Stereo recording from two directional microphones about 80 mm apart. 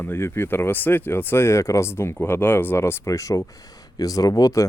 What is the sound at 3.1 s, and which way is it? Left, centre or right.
A man's voice, left.